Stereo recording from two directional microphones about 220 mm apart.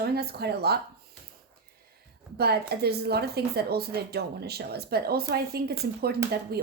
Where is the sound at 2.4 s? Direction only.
45° right (ahead or behind).